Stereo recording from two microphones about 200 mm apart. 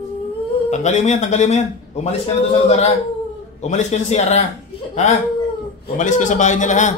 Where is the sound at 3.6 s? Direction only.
35° left (ahead or behind).